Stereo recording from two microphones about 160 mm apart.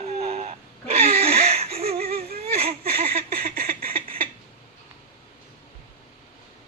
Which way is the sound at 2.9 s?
65° right (ahead or behind).